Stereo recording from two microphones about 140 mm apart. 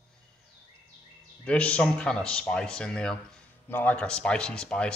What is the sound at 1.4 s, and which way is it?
Speech, 10° left (ahead or behind).